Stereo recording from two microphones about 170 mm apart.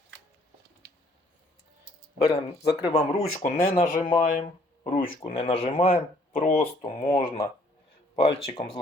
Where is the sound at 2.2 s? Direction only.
30° left (ahead or behind).